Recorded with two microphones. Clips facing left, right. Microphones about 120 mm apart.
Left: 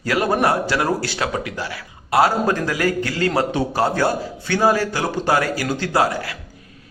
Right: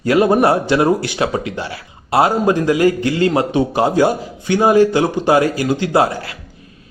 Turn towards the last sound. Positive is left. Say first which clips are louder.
# right 4 dB
turn(degrees=-25)  # may be behind; listen again after turning